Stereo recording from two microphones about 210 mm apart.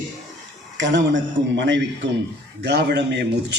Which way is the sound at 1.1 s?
60° right (ahead or behind).